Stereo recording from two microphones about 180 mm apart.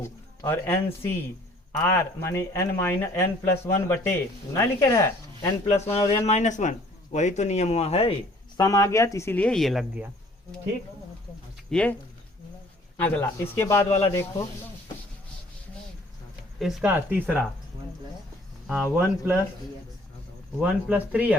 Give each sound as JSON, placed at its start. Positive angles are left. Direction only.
{"t": 0.0, "sound": "speech", "side_deg": 15}
{"t": 1.8, "sound": "speech", "side_deg": 15}
{"t": 5.6, "sound": "speech", "side_deg": 35}
{"t": 8.5, "sound": "speech", "side_deg": 20}
{"t": 11.7, "sound": "speech", "side_deg": 5}
{"t": 13.0, "sound": "speech", "side_deg": 10}
{"t": 16.6, "sound": "speech", "side_deg": -5}
{"t": 18.9, "sound": "speech", "side_deg": -10}
{"t": 20.6, "sound": "speech", "side_deg": -5}